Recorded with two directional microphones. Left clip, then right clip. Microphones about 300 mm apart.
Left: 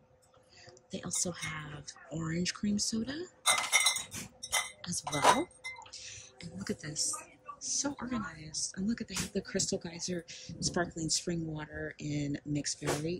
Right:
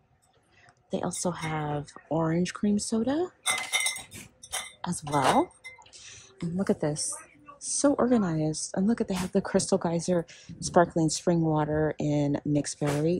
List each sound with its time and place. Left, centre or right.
0.8 s speech: centre
5.1 s speech: centre